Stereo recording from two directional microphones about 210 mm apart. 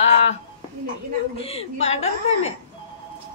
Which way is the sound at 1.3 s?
30° left (ahead or behind).